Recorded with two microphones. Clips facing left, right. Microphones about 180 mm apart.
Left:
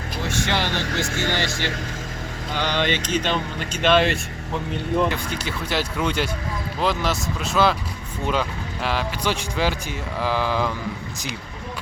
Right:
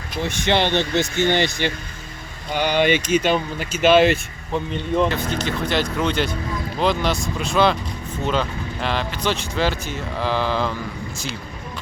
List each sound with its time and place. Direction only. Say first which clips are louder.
0.3 s speech: right 5 dB; 20° right (ahead or behind); by 4.2 s 5° right (ahead or behind)
4.9 s speech: right 3 dB; 10° left (ahead or behind)